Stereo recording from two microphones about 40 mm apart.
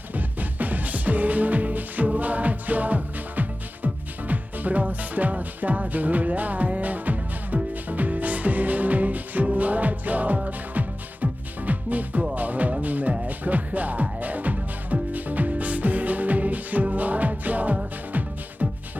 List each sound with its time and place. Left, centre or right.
0.1 s music: right